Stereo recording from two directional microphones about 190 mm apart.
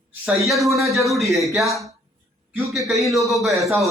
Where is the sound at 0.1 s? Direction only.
15° right (ahead or behind).